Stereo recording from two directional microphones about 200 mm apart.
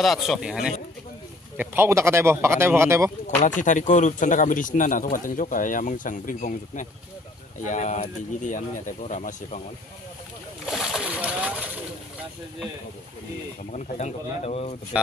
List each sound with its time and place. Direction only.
0.0 s a man's voice: centre (ahead or behind)
3.4 s a man's voice: 40° left (ahead or behind)
10.7 s bird: centre (ahead or behind)
13.7 s a man's voice: 35° left (ahead or behind)